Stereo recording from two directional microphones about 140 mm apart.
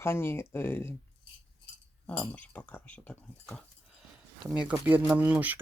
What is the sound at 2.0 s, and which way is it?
Speech, 10° left (ahead or behind).